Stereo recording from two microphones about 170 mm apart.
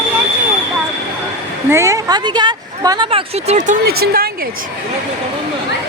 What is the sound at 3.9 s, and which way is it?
Speech, 65° right (ahead or behind).